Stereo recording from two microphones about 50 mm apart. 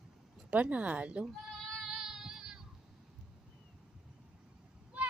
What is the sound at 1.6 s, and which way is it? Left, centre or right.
Child singing, centre.